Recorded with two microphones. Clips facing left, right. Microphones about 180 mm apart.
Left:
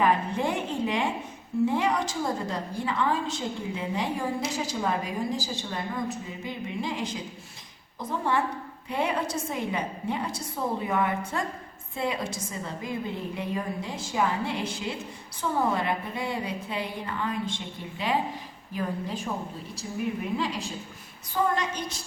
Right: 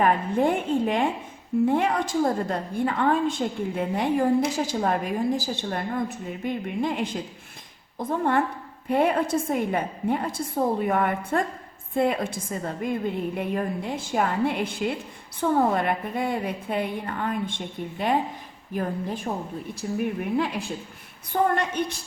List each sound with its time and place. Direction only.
0.0 s a woman's voice: 50° right (ahead or behind)